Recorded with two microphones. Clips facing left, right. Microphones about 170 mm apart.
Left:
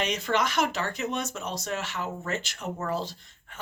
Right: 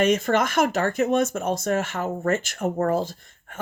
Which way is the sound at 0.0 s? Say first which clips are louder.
Right 7 dB; 50° right (ahead or behind).